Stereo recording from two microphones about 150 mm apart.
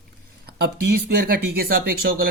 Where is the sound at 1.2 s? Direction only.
85° right.